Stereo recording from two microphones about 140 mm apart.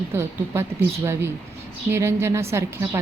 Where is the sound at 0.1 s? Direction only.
15° right (ahead or behind).